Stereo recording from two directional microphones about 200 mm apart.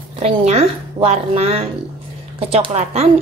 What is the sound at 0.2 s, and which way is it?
A woman's voice, 30° right (ahead or behind).